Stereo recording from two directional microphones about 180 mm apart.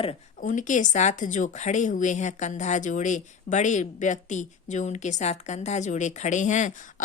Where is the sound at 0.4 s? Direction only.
45° left (ahead or behind).